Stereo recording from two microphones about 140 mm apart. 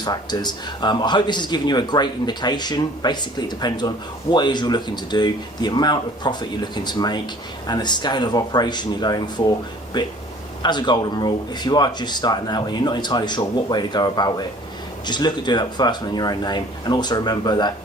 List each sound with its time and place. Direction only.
0.0 s speech: 30° left (ahead or behind)